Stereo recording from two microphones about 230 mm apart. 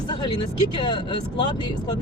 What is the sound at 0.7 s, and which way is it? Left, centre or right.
Speech, centre.